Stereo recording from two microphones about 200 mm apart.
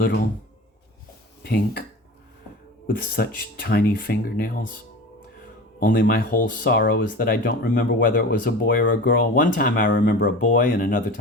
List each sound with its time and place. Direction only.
1.5 s speech: 50° left (ahead or behind)
2.8 s speech: 45° left (ahead or behind)
5.8 s speech: 45° left (ahead or behind)